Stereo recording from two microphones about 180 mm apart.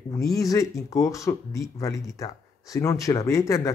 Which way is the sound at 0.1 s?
20° left (ahead or behind).